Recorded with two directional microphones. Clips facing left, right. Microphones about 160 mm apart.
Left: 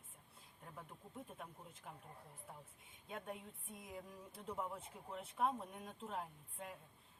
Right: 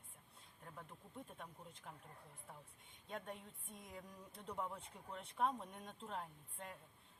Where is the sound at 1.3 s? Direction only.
5° left (ahead or behind).